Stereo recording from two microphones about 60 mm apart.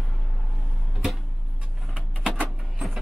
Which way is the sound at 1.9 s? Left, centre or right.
Right.